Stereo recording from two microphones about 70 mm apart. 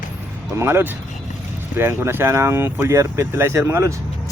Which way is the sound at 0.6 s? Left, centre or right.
Right.